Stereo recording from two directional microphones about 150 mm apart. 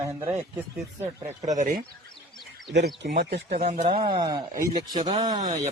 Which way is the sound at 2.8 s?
90° right.